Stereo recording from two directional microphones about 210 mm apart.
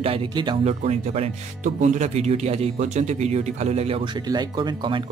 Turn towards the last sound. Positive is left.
turn(degrees=-20)  # may be behind; listen again after turning